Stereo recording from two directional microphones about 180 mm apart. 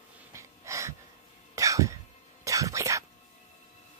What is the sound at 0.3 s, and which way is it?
Wheeze, 15° right (ahead or behind).